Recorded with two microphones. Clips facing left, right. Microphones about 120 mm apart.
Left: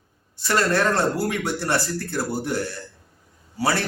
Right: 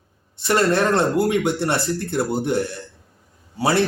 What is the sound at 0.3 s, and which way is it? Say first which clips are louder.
Speech: right 3 dB; 25° right (ahead or behind).